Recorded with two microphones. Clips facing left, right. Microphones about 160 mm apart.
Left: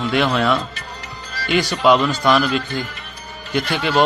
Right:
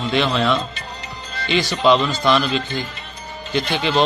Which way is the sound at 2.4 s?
20° right (ahead or behind).